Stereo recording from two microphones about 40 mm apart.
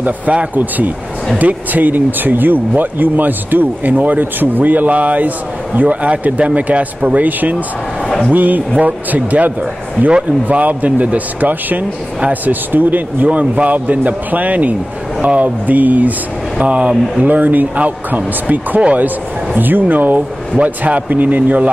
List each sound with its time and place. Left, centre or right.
0.0 s speech: right
0.6 s speech: right
10.5 s speech: right
16.6 s speech: right
17.3 s speech: right
20.5 s speech: right